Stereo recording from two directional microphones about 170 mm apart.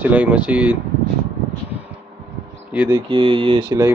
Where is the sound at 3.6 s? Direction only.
15° right (ahead or behind).